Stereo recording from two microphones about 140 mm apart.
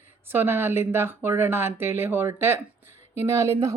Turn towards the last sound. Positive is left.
turn(degrees=-20)  # may be behind; listen again after turning